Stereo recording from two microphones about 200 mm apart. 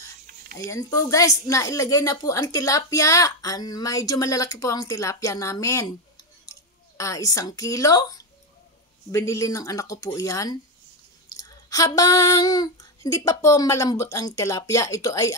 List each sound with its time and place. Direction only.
0.6 s speech: 15° left (ahead or behind)